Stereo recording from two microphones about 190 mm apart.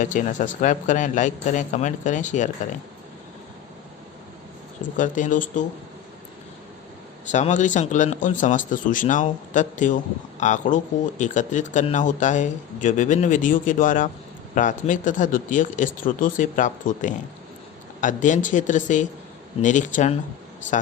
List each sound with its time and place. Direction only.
0.0 s speech: 40° left (ahead or behind)
4.9 s speech: 45° left (ahead or behind)
7.3 s speech: 40° left (ahead or behind)